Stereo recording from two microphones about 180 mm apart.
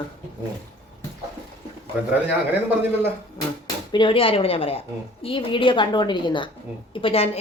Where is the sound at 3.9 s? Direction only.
25° left (ahead or behind).